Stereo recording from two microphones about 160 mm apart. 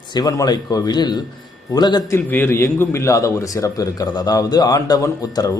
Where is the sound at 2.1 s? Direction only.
15° left (ahead or behind).